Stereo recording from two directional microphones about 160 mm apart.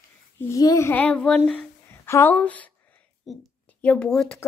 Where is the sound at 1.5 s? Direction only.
10° left (ahead or behind).